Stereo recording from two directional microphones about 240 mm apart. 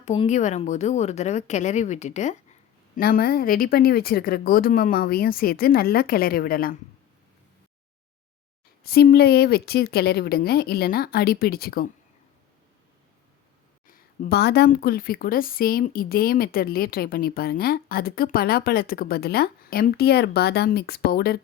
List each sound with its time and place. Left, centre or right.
0.0 s a woman's voice: left
8.8 s a woman's voice: left
13.8 s a woman's voice: left